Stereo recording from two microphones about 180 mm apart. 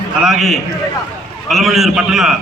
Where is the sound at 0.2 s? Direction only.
Centre (ahead or behind).